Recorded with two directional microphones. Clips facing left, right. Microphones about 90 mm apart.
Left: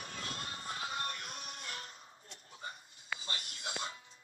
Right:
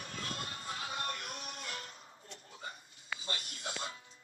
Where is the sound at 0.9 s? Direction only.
35° right (ahead or behind).